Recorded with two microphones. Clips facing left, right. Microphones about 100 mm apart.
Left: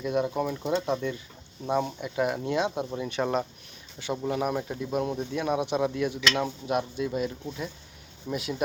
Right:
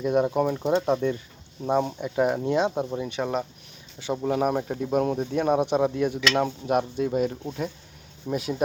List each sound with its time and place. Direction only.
0.0 s speech: 45° right (ahead or behind)
0.5 s speech: 25° right (ahead or behind)
0.8 s speech: 40° right (ahead or behind)
3.2 s speech: 5° left (ahead or behind)
4.3 s speech: 40° right (ahead or behind)